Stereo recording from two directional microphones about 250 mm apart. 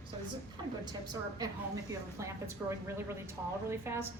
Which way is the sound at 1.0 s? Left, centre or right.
Centre.